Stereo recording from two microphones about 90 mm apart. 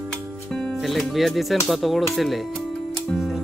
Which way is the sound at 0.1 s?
5° left (ahead or behind).